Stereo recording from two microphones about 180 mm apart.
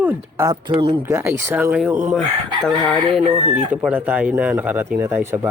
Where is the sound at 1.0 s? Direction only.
15° right (ahead or behind).